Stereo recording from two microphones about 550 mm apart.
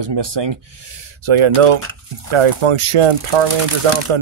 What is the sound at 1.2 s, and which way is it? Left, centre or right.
Speech, right.